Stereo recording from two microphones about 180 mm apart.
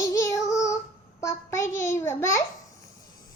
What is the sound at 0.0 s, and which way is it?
Child singing, 20° left (ahead or behind).